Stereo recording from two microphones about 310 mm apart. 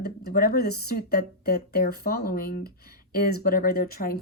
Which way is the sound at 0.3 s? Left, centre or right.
Left.